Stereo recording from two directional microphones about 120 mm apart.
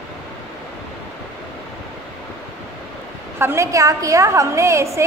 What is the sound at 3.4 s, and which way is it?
A woman's voice, 20° right (ahead or behind).